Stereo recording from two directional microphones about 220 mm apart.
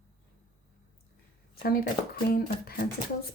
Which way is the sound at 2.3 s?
45° left (ahead or behind).